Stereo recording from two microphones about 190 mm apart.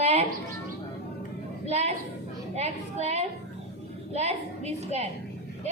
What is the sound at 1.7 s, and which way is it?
A woman's voice, 35° right (ahead or behind).